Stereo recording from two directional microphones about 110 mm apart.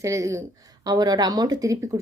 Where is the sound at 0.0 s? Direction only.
25° right (ahead or behind).